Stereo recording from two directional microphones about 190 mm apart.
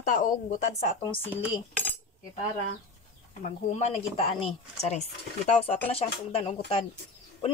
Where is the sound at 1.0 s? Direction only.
30° left (ahead or behind).